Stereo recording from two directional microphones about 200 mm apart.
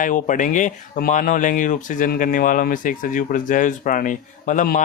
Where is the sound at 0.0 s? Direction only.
40° left (ahead or behind).